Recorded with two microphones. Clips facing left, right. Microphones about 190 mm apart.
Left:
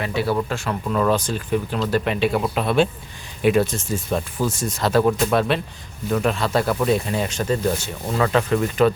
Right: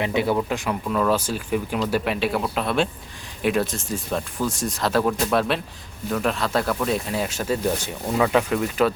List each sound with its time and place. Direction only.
0.0 s speech: 20° right (ahead or behind)
0.9 s speech: centre (ahead or behind)